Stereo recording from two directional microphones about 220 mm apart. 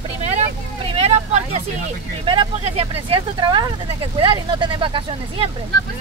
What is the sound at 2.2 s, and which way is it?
Speech, 25° right (ahead or behind).